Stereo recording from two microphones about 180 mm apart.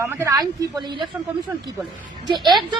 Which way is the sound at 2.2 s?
25° right (ahead or behind).